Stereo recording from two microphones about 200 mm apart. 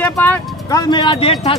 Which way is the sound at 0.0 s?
10° left (ahead or behind).